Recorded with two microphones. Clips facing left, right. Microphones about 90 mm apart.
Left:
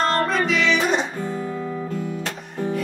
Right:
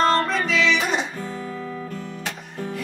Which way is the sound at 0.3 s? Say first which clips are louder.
Left 1 dB; centre (ahead or behind).